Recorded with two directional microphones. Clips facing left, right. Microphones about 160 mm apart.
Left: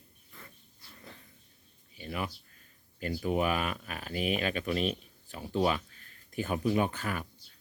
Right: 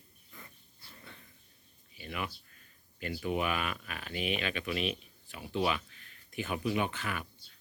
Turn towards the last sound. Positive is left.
turn(degrees=40)  # may be behind; listen again after turning